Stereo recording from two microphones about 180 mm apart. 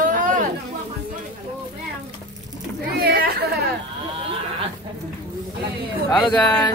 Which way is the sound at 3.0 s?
60° right (ahead or behind).